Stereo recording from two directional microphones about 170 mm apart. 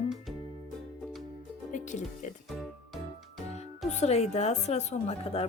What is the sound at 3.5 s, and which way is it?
Speech, 40° left (ahead or behind).